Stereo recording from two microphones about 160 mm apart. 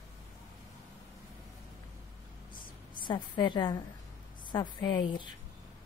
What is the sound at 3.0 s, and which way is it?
A woman's voice, 30° left (ahead or behind).